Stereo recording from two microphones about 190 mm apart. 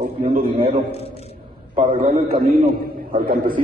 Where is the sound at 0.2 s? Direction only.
45° right (ahead or behind).